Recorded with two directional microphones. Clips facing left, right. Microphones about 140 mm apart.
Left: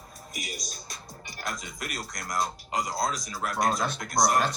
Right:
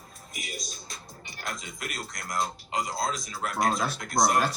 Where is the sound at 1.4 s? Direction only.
45° left (ahead or behind).